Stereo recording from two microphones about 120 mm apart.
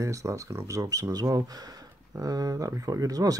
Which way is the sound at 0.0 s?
25° right (ahead or behind).